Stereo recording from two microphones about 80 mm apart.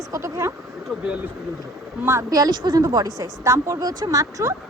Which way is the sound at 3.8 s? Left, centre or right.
Right.